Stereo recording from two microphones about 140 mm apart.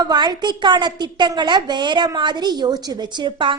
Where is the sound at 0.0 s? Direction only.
30° right (ahead or behind).